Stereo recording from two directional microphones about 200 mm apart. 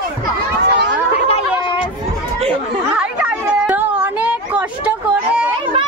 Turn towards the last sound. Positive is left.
turn(degrees=-5)  # may be behind; listen again after turning